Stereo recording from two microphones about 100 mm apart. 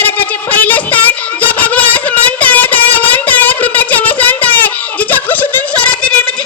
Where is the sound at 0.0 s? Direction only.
15° left (ahead or behind).